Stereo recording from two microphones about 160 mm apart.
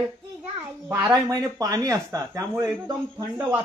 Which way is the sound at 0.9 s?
10° right (ahead or behind).